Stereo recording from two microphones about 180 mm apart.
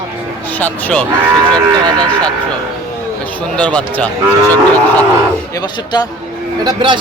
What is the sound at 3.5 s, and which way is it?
Speech, 5° left (ahead or behind).